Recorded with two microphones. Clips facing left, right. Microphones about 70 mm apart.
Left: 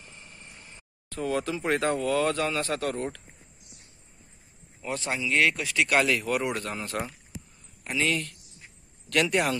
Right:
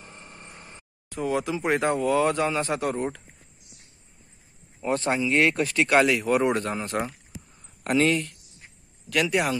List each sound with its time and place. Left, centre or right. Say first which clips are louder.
0.0 s vehicle: right 4 dB; right
1.0 s speech: right 2 dB; centre
4.8 s speech: right 6 dB; right
5.6 s speech: right 4 dB; right
5.9 s speech: right 4 dB; right
9.1 s speech: right 1 dB; centre